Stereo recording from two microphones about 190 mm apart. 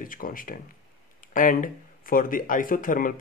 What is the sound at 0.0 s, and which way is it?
Speech, 45° left (ahead or behind).